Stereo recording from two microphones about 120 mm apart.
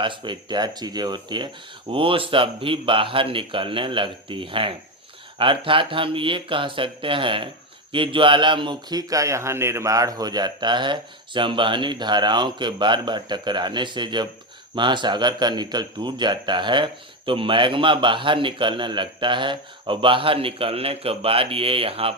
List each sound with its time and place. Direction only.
0.0 s speech: 40° right (ahead or behind)